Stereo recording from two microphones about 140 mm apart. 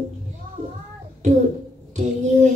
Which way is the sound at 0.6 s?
60° right (ahead or behind).